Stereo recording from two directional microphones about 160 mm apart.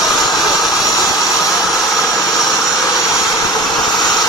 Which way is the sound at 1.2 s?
20° left (ahead or behind).